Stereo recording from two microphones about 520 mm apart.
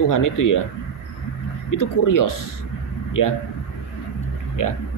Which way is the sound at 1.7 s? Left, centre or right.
Left.